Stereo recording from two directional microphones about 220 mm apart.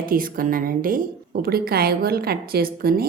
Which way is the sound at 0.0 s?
40° right (ahead or behind).